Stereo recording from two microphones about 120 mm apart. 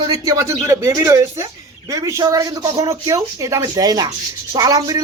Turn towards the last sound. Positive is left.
turn(degrees=-30)  # may be behind; listen again after turning